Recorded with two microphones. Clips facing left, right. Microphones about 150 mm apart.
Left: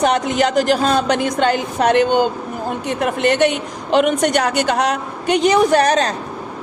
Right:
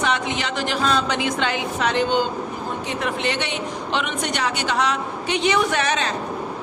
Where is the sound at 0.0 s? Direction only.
45° left (ahead or behind).